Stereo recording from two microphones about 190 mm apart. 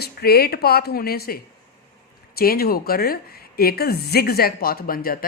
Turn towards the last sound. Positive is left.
turn(degrees=50)  # may be behind; listen again after turning